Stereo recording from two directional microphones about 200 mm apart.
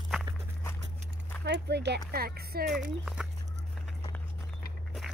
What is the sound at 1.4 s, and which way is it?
Speech, 55° right (ahead or behind).